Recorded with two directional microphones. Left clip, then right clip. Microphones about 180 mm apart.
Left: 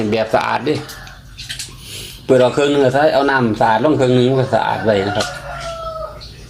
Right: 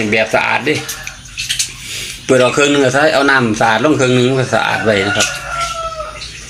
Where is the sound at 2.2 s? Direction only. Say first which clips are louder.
Right 2 dB; 5° right (ahead or behind).